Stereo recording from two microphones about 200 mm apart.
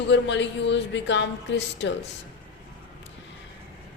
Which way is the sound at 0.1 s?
65° left (ahead or behind).